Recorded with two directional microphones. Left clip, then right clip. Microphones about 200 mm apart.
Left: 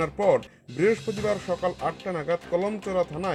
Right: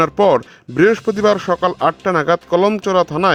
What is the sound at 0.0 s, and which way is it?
Speech, 55° right (ahead or behind).